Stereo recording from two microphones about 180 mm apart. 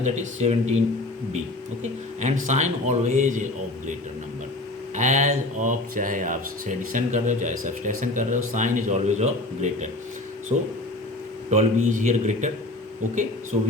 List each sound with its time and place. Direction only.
0.0 s speech: 40° right (ahead or behind)
1.8 s speech: 40° right (ahead or behind)
4.9 s speech: 40° right (ahead or behind)
11.5 s speech: 45° right (ahead or behind)